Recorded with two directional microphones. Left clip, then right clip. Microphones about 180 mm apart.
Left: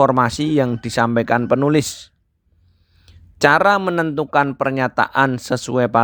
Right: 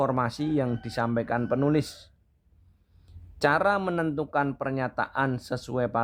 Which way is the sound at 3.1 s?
30° left (ahead or behind).